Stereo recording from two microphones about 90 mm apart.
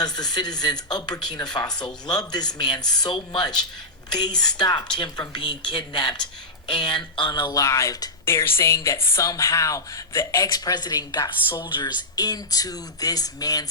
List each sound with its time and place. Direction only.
0.0 s speech: 50° left (ahead or behind)
7.5 s speech: 35° left (ahead or behind)
10.4 s speech: 45° left (ahead or behind)
11.4 s speech: 65° left (ahead or behind); by 13.7 s 45° left (ahead or behind)